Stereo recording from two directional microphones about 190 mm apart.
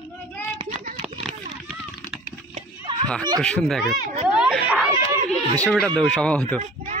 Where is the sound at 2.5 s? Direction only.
25° right (ahead or behind).